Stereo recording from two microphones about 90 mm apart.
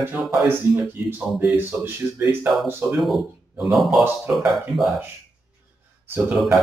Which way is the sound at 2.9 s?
Centre (ahead or behind).